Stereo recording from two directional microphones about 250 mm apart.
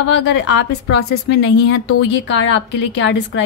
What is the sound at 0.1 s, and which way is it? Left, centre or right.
A woman's voice, left.